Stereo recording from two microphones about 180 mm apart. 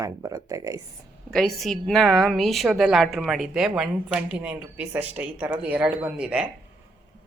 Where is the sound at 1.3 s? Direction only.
Centre (ahead or behind).